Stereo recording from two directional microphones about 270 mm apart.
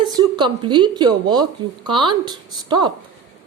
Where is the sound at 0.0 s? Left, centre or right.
Centre.